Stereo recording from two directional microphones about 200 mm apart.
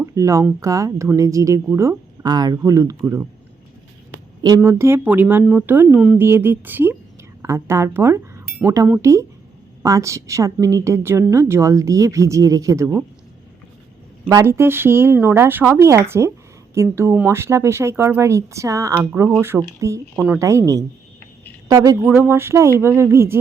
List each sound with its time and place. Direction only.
0.0 s speech: 15° right (ahead or behind)
4.4 s speech: 15° right (ahead or behind)
14.3 s speech: 15° right (ahead or behind)